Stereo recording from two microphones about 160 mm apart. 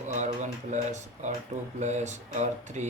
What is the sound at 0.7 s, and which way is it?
Speech, 50° right (ahead or behind).